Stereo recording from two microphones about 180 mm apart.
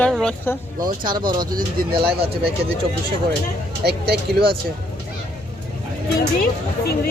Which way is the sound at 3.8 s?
60° right (ahead or behind).